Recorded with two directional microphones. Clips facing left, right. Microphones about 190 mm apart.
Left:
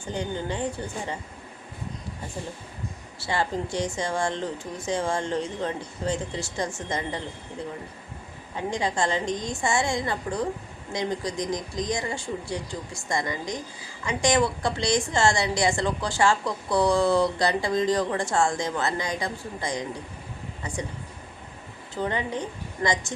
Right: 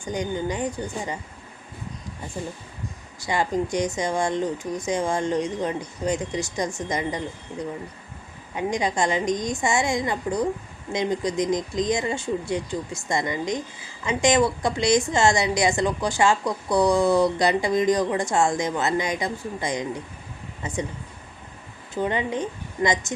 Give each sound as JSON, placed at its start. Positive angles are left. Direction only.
{"t": 0.0, "sound": "speech", "side_deg": -15}
{"t": 3.2, "sound": "speech", "side_deg": -15}
{"t": 8.5, "sound": "speech", "side_deg": -15}
{"t": 22.0, "sound": "speech", "side_deg": -20}